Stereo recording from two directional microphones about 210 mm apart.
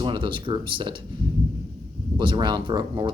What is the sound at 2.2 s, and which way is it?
Speech, 20° right (ahead or behind).